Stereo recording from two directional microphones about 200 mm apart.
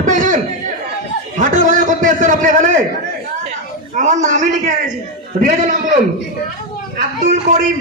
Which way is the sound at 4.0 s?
35° right (ahead or behind).